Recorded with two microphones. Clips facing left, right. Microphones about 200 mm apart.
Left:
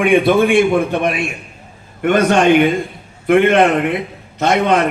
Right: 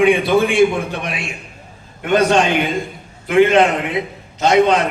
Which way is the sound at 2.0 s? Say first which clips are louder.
Left 2 dB; 55° left (ahead or behind).